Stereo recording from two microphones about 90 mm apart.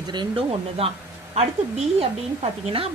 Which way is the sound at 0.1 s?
75° right (ahead or behind).